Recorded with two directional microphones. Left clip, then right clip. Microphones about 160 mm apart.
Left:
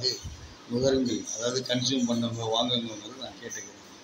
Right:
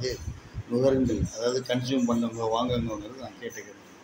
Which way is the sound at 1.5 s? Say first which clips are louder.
Even; 20° right (ahead or behind).